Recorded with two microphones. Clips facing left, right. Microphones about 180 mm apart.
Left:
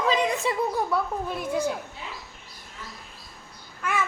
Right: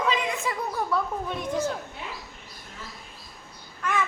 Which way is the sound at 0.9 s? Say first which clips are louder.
Left 1 dB; 5° left (ahead or behind).